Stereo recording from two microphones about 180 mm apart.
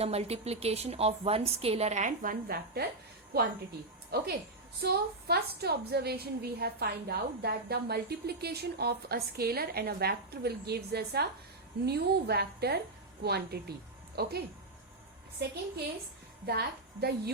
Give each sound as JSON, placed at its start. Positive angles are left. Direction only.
{"t": 0.0, "sound": "a woman's voice", "side_deg": -35}
{"t": 4.1, "sound": "a woman's voice", "side_deg": -60}
{"t": 16.5, "sound": "a woman's voice", "side_deg": -65}